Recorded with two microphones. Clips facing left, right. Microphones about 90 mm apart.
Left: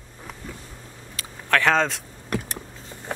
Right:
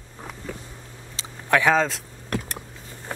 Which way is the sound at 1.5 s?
10° right (ahead or behind).